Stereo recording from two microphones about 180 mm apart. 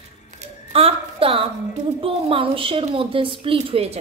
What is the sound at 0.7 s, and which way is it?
A woman's voice, 35° right (ahead or behind).